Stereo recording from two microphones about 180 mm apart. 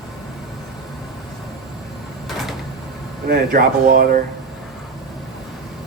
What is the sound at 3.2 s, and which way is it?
Speech, 55° right (ahead or behind).